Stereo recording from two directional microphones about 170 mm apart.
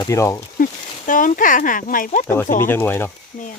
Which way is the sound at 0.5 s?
50° left (ahead or behind).